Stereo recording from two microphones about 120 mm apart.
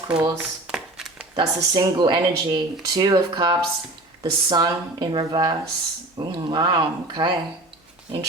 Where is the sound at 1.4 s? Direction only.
40° right (ahead or behind).